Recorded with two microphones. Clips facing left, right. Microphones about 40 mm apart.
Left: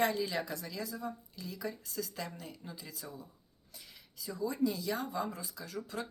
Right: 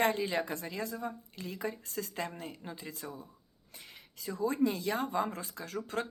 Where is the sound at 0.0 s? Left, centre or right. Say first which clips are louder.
Right 2 dB; right.